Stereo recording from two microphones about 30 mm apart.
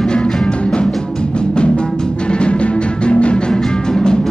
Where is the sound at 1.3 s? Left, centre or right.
Left.